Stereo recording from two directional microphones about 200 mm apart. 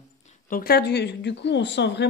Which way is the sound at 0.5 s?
50° left (ahead or behind).